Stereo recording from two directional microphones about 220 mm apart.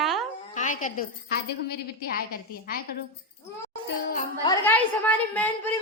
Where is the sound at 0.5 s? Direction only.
35° left (ahead or behind).